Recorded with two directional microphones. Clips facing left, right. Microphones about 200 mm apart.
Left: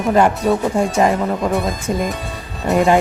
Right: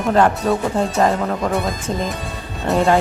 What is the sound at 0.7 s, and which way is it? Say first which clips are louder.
Speech: left 2 dB; 10° left (ahead or behind).